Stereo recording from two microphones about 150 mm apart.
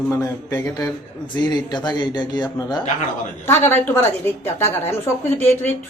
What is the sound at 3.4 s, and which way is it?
A woman's voice, 15° left (ahead or behind).